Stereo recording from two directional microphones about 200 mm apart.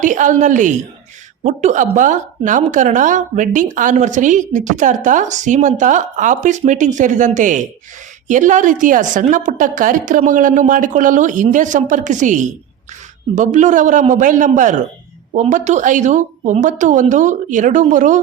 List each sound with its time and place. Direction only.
0.0 s a woman's voice: 40° right (ahead or behind)